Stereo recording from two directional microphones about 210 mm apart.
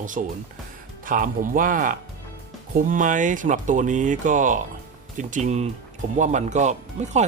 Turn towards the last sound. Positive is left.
turn(degrees=-35)  # may be behind; listen again after turning